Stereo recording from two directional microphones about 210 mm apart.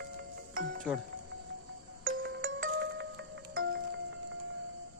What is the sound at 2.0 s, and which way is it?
Music, 60° right (ahead or behind).